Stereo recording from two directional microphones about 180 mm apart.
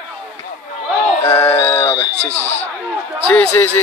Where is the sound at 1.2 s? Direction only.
10° left (ahead or behind).